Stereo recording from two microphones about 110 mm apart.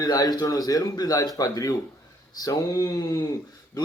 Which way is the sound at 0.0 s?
35° left (ahead or behind).